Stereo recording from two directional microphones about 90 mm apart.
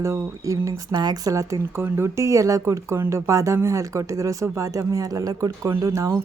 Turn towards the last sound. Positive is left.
turn(degrees=-35)  # may be behind; listen again after turning